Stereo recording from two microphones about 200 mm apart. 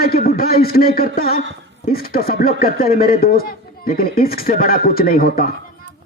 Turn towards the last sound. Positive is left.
turn(degrees=45)  # may be behind; listen again after turning